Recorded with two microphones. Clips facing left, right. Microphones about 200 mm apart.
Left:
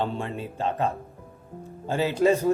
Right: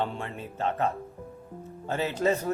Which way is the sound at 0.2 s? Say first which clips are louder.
Left 3 dB; 20° left (ahead or behind).